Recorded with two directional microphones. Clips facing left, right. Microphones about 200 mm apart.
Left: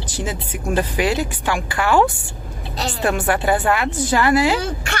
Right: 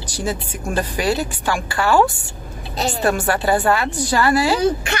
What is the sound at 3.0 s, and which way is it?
Speech, 15° left (ahead or behind).